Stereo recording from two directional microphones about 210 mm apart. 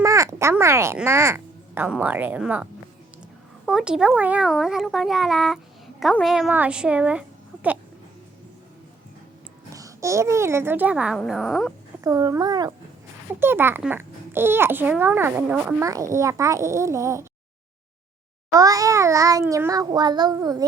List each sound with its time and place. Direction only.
0.0 s speech: 15° right (ahead or behind)
3.7 s a woman's voice: 5° right (ahead or behind)
9.7 s a child's voice: 15° right (ahead or behind)
12.0 s a child's voice: 15° right (ahead or behind)
18.5 s a child's voice: 15° right (ahead or behind)